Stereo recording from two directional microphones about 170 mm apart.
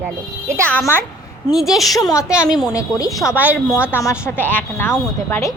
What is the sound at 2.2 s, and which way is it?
Speech, 5° right (ahead or behind).